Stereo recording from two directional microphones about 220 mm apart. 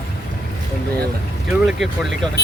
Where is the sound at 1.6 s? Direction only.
Centre (ahead or behind).